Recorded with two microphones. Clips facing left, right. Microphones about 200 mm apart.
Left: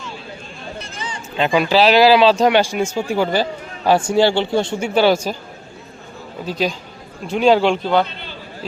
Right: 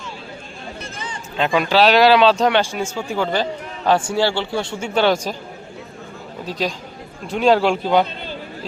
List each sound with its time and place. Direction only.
1.4 s speech: centre (ahead or behind); by 4.9 s 20° left (ahead or behind)
4.9 s speech: 5° left (ahead or behind)
6.4 s speech: centre (ahead or behind)